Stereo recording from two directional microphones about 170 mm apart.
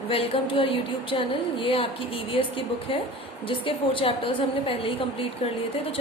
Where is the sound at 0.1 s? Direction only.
30° left (ahead or behind).